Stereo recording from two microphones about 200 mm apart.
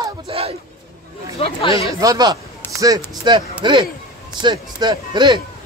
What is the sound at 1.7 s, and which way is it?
Speech, 15° right (ahead or behind).